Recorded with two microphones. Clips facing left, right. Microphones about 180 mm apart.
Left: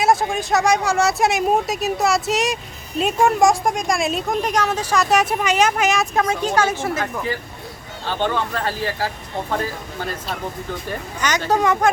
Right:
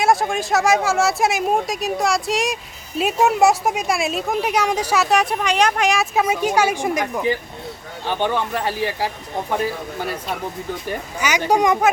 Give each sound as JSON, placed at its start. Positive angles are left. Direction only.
{"t": 0.0, "sound": "speech", "side_deg": 0}
{"t": 5.0, "sound": "a woman's voice", "side_deg": 0}
{"t": 10.8, "sound": "a woman's voice", "side_deg": -10}